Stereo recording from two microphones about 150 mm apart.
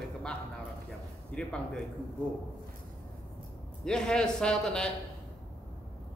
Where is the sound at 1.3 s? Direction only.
5° left (ahead or behind).